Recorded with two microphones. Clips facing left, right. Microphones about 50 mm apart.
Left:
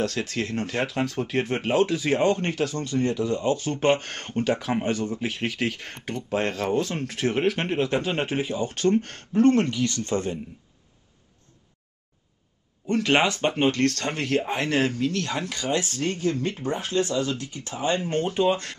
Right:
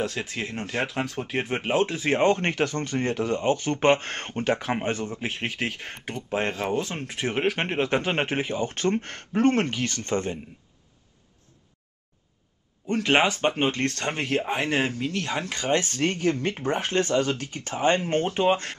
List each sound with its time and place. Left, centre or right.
0.0 s speech: centre
12.8 s speech: centre